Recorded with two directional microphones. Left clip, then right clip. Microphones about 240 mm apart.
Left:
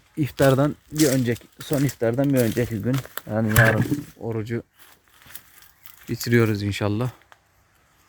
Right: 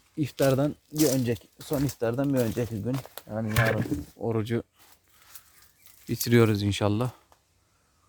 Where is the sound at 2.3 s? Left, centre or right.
Centre.